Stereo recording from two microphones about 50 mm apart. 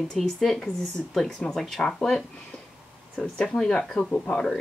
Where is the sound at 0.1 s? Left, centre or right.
Centre.